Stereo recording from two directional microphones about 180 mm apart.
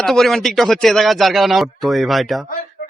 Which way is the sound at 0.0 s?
Centre (ahead or behind).